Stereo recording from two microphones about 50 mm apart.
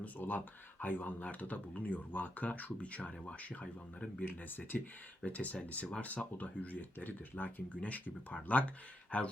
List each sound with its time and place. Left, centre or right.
0.0 s speech: left
4.3 s speech: left